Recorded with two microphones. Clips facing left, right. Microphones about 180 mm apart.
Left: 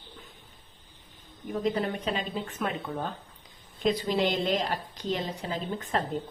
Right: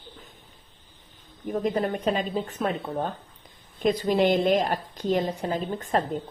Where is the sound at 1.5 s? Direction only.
50° right (ahead or behind).